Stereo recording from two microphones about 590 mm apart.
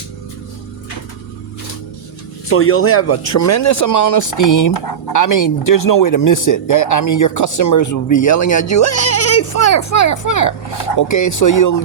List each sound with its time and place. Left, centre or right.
2.5 s speech: left